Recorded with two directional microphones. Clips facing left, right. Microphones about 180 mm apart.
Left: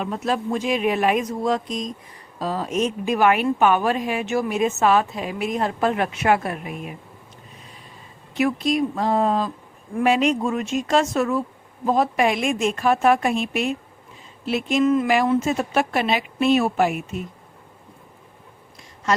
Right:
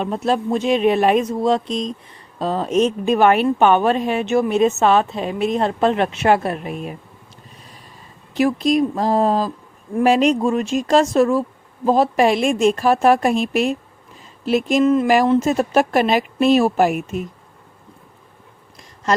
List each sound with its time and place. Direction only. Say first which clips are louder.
0.0 s a woman's voice: right 4 dB; 30° right (ahead or behind)
8.4 s a woman's voice: right 4 dB; 35° right (ahead or behind)